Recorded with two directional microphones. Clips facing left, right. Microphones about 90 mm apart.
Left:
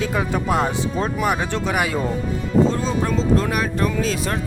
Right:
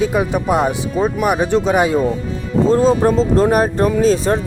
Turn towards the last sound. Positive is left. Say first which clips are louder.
# right 9 dB
turn(degrees=-35)  # may be behind; listen again after turning